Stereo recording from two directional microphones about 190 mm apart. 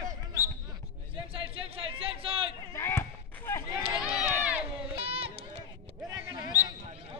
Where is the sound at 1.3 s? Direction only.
30° right (ahead or behind).